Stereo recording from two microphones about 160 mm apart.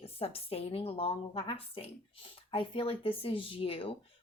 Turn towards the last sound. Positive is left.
turn(degrees=35)  # may be behind; listen again after turning